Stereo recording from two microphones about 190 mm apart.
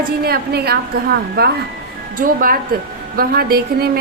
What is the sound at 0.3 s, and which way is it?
A woman's voice, 55° right (ahead or behind).